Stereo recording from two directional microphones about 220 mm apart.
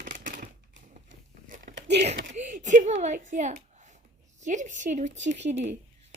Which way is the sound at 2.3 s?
35° right (ahead or behind).